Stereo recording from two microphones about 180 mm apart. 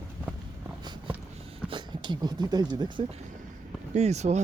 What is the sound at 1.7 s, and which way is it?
Speech, 25° right (ahead or behind).